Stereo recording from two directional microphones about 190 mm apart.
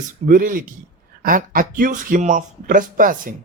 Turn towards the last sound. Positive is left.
turn(degrees=-45)  # may be behind; listen again after turning